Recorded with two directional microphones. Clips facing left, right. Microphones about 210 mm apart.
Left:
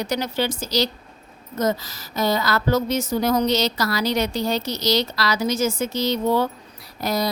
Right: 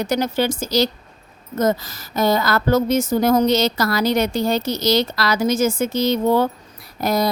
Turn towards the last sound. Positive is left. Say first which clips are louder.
# right 4 dB
turn(degrees=-50)  # may be behind; listen again after turning